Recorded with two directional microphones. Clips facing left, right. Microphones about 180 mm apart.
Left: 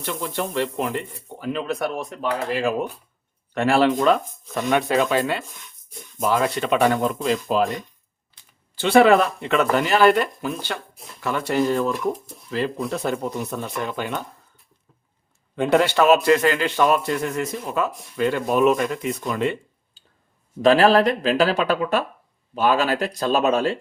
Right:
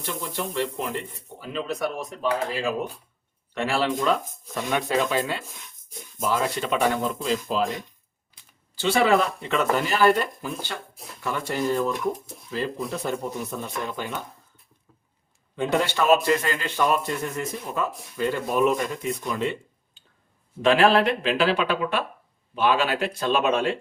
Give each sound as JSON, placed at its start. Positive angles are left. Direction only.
{"t": 0.0, "sound": "speech", "side_deg": 60}
{"t": 8.8, "sound": "a man's voice", "side_deg": 60}
{"t": 15.5, "sound": "a man's voice", "side_deg": 65}
{"t": 19.3, "sound": "speech", "side_deg": 60}
{"t": 20.0, "sound": "clicking", "side_deg": 35}
{"t": 20.6, "sound": "speech", "side_deg": 40}